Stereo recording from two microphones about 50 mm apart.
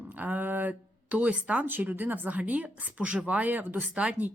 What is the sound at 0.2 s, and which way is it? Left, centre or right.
Speech, right.